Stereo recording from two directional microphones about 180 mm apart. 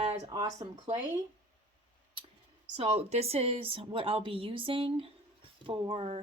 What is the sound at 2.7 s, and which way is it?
Speech, 35° right (ahead or behind).